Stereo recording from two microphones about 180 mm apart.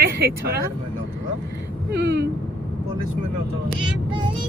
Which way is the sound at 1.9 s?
70° right (ahead or behind).